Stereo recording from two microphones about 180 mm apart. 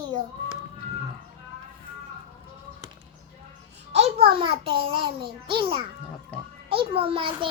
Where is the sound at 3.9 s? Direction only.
35° right (ahead or behind).